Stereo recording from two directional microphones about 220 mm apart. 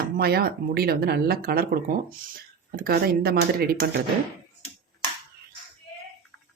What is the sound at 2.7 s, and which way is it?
Speech, 45° right (ahead or behind).